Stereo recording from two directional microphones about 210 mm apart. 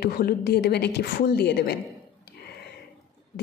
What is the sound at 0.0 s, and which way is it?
A woman's voice, 45° left (ahead or behind).